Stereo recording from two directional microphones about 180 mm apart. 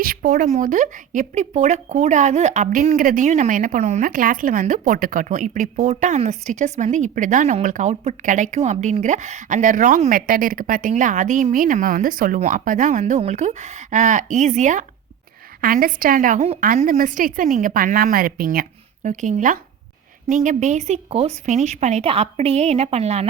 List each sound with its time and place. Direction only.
0.0 s a woman's voice: 50° right (ahead or behind); by 23.2 s 35° right (ahead or behind)